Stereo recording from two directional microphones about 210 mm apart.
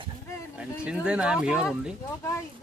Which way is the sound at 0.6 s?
5° right (ahead or behind).